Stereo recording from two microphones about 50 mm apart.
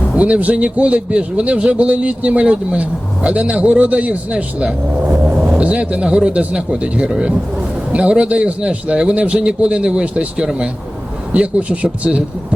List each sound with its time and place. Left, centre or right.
0.2 s a man's voice: right